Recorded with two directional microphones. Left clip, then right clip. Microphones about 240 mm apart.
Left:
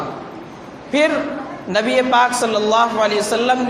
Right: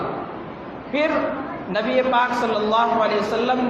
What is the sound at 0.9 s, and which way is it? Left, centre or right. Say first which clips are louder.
A man's voice: left 4 dB; left.